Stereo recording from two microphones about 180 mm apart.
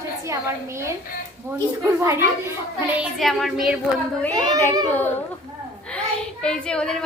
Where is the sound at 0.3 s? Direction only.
15° right (ahead or behind).